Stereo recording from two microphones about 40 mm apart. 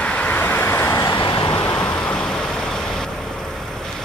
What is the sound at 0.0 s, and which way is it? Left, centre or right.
Vehicle, left.